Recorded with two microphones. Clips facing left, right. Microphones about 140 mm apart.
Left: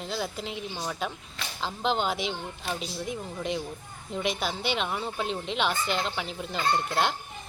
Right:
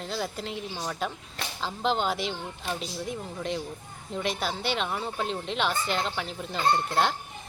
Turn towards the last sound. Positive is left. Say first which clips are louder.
# right 2 dB
turn(degrees=5)  # may be behind; listen again after turning